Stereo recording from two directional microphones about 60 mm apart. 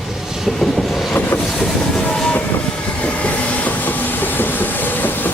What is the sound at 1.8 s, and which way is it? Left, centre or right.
Train, centre.